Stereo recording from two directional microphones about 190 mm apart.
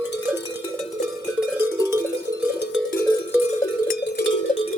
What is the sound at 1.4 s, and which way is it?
Cowbell, 10° right (ahead or behind).